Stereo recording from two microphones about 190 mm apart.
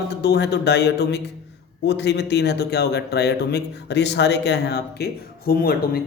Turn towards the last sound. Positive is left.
turn(degrees=50)  # may be behind; listen again after turning